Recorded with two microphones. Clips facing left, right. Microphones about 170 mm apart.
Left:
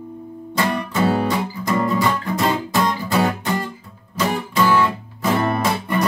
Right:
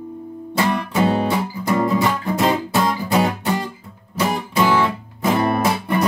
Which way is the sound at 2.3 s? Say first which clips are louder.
Right 1 dB; 15° right (ahead or behind).